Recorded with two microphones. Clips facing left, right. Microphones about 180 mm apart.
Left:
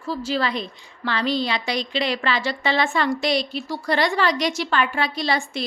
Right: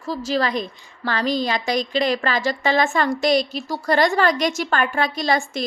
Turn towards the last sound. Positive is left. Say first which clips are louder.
# right 3 dB
turn(degrees=-45)  # may be behind; listen again after turning